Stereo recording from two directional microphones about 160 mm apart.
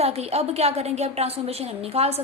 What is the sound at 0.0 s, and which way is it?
A woman's voice, 40° right (ahead or behind).